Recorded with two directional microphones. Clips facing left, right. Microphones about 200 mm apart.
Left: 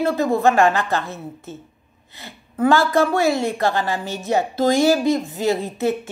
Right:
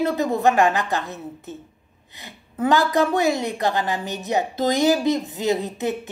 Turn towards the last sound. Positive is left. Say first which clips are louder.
# left 3 dB
turn(degrees=-20)  # may be behind; listen again after turning